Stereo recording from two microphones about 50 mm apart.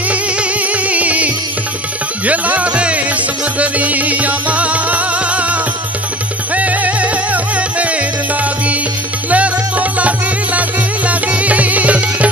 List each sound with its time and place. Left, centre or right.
0.1 s music: right
9.3 s music: right